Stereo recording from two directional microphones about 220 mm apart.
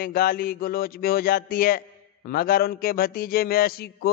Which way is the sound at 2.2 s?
40° left (ahead or behind).